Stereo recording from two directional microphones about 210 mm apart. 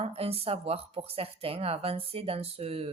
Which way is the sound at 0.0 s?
30° right (ahead or behind).